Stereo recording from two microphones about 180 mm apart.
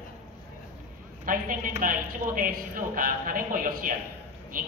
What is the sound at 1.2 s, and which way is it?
A woman's voice, 50° right (ahead or behind).